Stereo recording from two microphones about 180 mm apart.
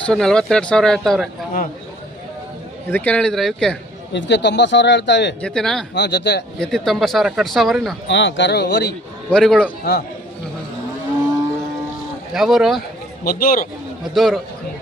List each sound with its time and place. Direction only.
0.0 s speech: 5° left (ahead or behind)
2.9 s speech: 10° left (ahead or behind)
4.1 s speech: 75° left (ahead or behind)
5.4 s speech: 5° left (ahead or behind)
5.9 s speech: 70° left (ahead or behind)
6.6 s speech: 5° left (ahead or behind)
8.0 s speech: 90° left; by 9.0 s 65° left (ahead or behind)
9.3 s speech: 5° left (ahead or behind)
9.8 s a man's voice: 65° left (ahead or behind)
12.3 s speech: centre (ahead or behind)
13.2 s a man's voice: 55° left (ahead or behind)
14.1 s speech: centre (ahead or behind)